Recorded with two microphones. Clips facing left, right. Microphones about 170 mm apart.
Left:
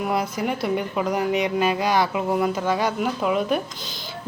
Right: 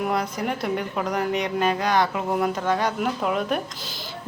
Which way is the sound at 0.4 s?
5° left (ahead or behind).